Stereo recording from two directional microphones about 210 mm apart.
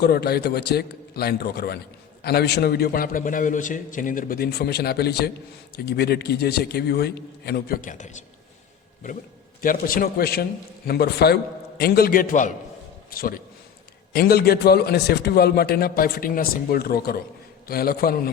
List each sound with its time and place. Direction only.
0.0 s a man's voice: 50° left (ahead or behind)
9.6 s a man's voice: 40° left (ahead or behind)